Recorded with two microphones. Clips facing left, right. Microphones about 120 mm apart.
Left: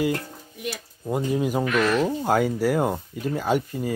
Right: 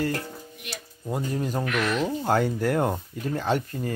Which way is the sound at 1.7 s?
40° left (ahead or behind).